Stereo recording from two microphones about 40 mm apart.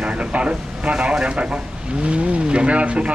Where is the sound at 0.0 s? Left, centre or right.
Right.